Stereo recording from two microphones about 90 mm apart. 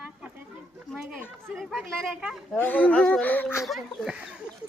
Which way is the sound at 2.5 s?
20° left (ahead or behind).